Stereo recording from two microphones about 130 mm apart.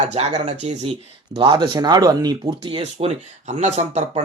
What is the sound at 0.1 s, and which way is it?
Speech, 60° right (ahead or behind).